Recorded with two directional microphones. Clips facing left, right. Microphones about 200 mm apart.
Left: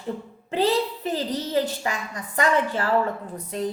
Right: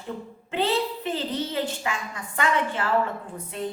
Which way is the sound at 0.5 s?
40° left (ahead or behind).